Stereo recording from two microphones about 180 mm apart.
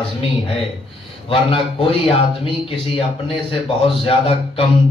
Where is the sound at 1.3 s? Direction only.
30° left (ahead or behind).